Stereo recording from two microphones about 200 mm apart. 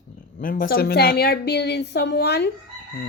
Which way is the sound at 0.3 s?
45° left (ahead or behind).